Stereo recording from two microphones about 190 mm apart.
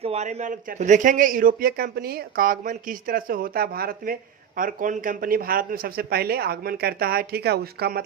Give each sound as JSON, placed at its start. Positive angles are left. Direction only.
{"t": 0.0, "sound": "speech", "side_deg": -35}